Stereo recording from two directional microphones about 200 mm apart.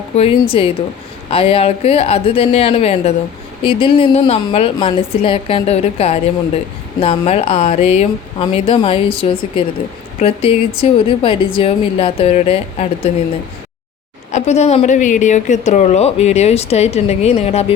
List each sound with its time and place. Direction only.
0.2 s a woman's voice: 25° left (ahead or behind)
14.3 s a woman's voice: 35° left (ahead or behind)